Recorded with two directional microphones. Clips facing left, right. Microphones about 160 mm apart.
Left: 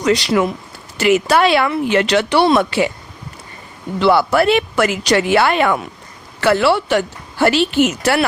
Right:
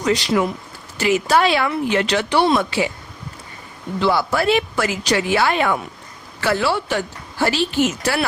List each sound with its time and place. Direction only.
0.0 s a woman's voice: 75° left (ahead or behind)
4.0 s a woman's voice: 70° left (ahead or behind)